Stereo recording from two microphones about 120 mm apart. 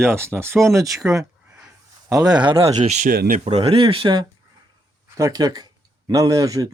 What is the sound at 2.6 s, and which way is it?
Speech, 70° right (ahead or behind).